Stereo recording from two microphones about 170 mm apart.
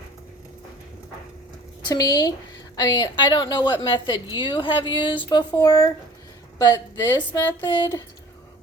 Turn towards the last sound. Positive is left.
turn(degrees=25)  # may be behind; listen again after turning